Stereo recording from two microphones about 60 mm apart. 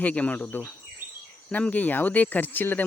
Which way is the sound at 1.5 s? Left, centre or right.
Left.